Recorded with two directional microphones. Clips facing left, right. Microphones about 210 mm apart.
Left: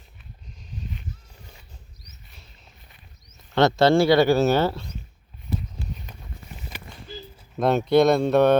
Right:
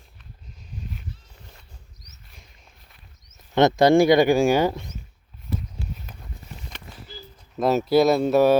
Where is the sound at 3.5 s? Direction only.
15° right (ahead or behind).